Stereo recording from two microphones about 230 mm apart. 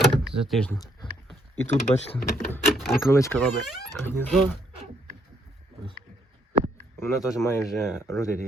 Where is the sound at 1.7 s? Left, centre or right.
Left.